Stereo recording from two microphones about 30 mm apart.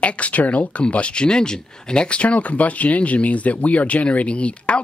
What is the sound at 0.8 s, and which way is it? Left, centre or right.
Speech, left.